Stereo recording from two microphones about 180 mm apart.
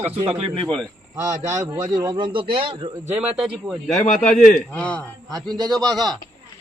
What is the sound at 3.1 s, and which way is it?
Speech, 5° right (ahead or behind).